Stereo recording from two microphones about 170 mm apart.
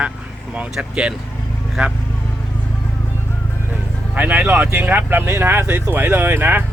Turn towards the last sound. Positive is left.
turn(degrees=-10)  # may be behind; listen again after turning